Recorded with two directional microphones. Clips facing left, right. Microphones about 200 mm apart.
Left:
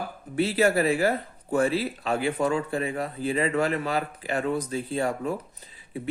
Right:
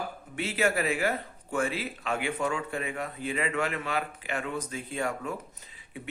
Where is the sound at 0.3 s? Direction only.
35° left (ahead or behind).